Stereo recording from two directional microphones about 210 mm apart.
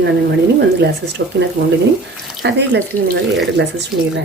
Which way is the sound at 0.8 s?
50° right (ahead or behind).